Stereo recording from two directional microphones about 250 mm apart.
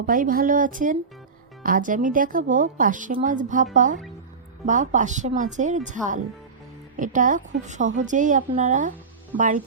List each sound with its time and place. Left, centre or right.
0.0 s a woman's voice: right